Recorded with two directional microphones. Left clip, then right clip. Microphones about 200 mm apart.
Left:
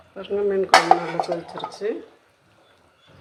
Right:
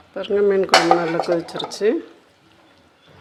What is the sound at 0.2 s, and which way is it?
Speech, 55° right (ahead or behind).